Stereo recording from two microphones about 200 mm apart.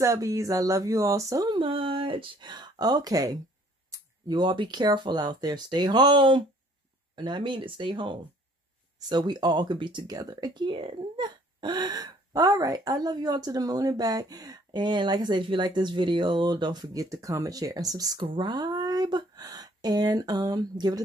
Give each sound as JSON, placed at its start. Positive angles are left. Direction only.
{"t": 0.0, "sound": "speech", "side_deg": -15}